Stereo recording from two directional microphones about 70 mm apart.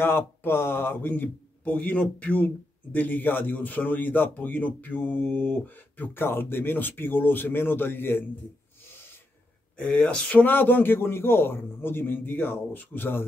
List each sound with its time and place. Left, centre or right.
0.0 s speech: left
9.8 s speech: centre
10.4 s a man's voice: left